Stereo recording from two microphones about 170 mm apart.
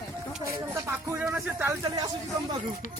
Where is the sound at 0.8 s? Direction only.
15° right (ahead or behind).